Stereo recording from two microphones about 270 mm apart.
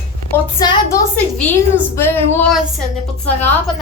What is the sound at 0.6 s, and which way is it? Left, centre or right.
A woman's voice, centre.